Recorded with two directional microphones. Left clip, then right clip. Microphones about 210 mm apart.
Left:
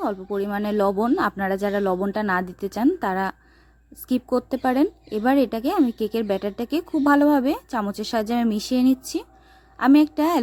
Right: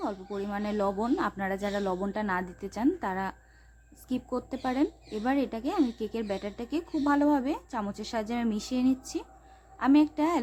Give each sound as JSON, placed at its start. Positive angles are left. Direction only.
{"t": 0.0, "sound": "speech", "side_deg": 35}